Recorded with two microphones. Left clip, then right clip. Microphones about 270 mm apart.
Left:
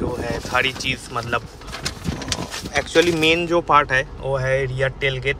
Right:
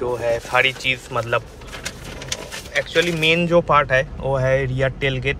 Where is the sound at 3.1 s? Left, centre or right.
Centre.